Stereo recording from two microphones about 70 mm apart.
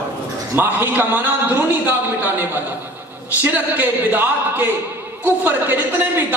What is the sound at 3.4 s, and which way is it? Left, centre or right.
Speech, right.